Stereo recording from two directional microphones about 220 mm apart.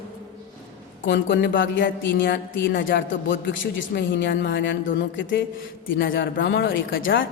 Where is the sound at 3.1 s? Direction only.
55° left (ahead or behind).